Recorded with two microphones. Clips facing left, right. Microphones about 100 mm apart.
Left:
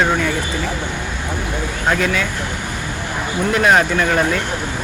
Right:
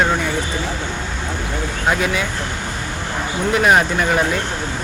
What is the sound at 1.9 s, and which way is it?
Speech, 10° right (ahead or behind).